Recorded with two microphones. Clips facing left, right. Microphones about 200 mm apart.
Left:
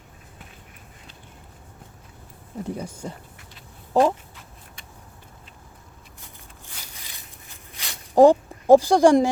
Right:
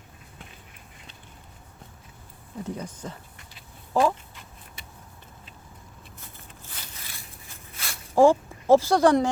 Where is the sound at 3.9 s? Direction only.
20° left (ahead or behind).